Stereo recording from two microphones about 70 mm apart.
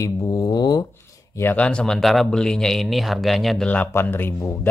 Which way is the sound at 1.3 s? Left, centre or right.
Left.